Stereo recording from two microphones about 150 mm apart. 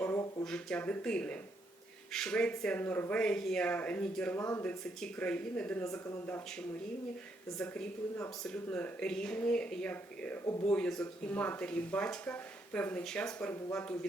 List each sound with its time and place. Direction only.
0.0 s a sound: 20° left (ahead or behind)
0.4 s speech: 5° left (ahead or behind)
4.9 s speech: 5° left (ahead or behind)
7.6 s speech: 10° left (ahead or behind)